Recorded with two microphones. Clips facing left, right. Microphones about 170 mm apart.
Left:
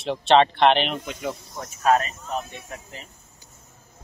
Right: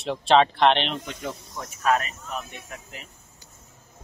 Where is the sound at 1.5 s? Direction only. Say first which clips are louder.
Left 3 dB; 35° left (ahead or behind).